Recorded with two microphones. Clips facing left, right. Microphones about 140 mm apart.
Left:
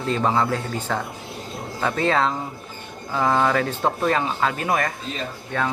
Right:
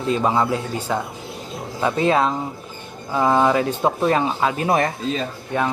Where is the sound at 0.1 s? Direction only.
10° right (ahead or behind); by 4.9 s 25° right (ahead or behind).